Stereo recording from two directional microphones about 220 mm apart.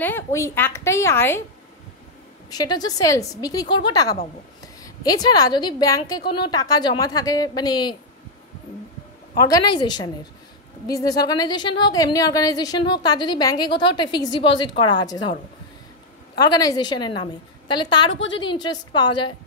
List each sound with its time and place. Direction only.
0.0 s a woman's voice: 10° left (ahead or behind)
2.5 s a woman's voice: 20° left (ahead or behind)
9.5 s a woman's voice: 20° left (ahead or behind)
16.3 s a woman's voice: 15° left (ahead or behind)